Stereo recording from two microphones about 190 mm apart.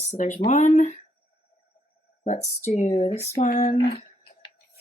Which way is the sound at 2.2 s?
35° left (ahead or behind).